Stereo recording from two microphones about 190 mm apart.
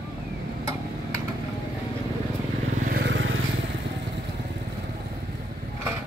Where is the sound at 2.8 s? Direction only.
55° right (ahead or behind); by 3.3 s 75° right (ahead or behind).